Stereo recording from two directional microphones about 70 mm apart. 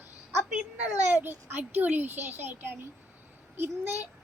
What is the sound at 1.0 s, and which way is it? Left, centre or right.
A child's voice, right.